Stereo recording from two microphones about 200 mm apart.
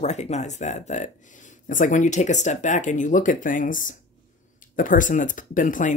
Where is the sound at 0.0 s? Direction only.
35° left (ahead or behind).